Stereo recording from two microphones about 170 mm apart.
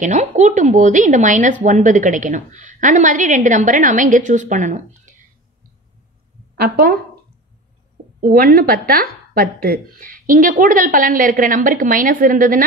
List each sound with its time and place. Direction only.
0.0 s speech: 40° right (ahead or behind)
6.5 s a woman's voice: 65° right (ahead or behind)
8.2 s a woman's voice: 60° right (ahead or behind)